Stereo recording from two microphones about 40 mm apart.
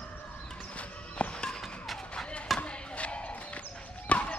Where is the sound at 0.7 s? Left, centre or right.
Left.